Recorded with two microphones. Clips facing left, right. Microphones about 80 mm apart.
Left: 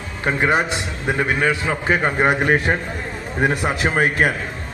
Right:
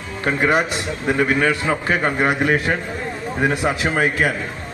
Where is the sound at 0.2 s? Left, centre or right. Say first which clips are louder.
Even; left.